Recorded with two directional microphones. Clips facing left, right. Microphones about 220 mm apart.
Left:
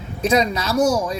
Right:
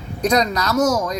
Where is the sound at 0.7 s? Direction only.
10° left (ahead or behind).